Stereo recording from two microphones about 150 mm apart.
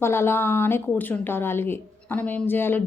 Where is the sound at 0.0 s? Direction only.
15° left (ahead or behind).